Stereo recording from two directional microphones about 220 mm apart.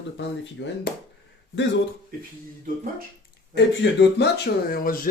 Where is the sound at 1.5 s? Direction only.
55° left (ahead or behind).